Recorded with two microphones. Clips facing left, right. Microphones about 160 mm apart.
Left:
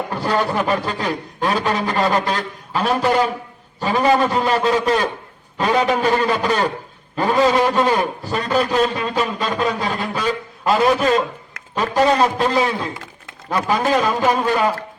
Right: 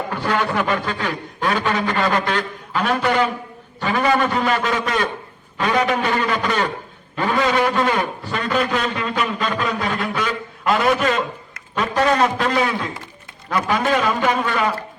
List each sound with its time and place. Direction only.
0.1 s a man's voice: 35° left (ahead or behind)